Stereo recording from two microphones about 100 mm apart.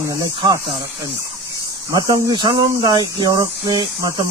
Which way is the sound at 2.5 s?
45° right (ahead or behind).